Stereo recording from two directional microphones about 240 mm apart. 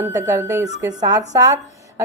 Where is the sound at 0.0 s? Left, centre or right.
Centre.